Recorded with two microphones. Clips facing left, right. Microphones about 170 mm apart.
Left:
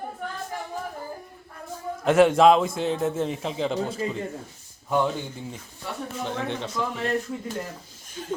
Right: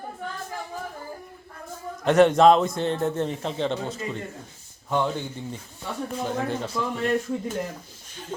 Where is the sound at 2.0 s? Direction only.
5° left (ahead or behind).